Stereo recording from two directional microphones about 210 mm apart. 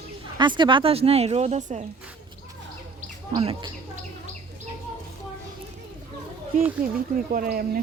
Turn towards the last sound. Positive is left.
turn(degrees=-45)  # may be behind; listen again after turning